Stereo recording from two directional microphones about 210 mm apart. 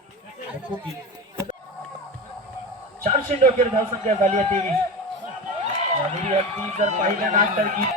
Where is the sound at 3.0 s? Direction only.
35° right (ahead or behind).